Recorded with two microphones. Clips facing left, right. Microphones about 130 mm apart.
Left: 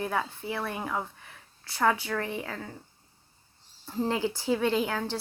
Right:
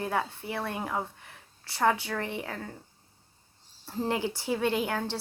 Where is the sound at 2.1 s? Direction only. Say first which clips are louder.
Left 1 dB; 20° right (ahead or behind).